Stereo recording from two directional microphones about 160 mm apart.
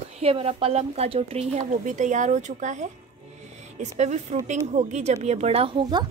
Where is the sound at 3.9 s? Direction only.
45° right (ahead or behind).